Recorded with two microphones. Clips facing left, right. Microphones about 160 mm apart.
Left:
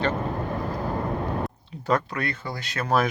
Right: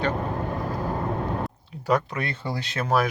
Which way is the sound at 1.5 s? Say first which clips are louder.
Right 1 dB; 10° right (ahead or behind).